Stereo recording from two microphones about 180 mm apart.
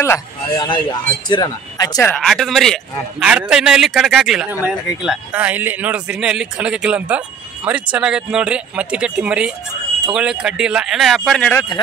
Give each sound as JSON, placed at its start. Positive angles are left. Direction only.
{"t": 0.0, "sound": "a man's voice", "side_deg": 20}
{"t": 2.0, "sound": "a man's voice", "side_deg": 5}